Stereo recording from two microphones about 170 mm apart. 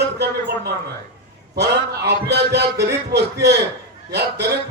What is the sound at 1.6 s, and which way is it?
A man's voice, 75° right (ahead or behind).